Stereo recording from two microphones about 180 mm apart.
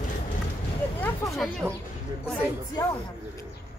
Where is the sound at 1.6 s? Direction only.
15° right (ahead or behind).